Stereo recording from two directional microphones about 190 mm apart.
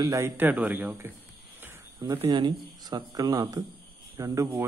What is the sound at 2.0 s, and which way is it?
Speech, 25° right (ahead or behind).